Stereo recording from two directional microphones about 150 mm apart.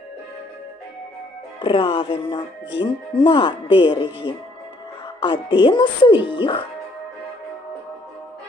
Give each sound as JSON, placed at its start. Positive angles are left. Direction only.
{"t": 1.6, "sound": "speech", "side_deg": 35}